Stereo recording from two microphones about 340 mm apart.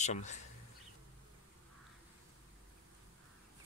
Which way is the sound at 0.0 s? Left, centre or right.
Left.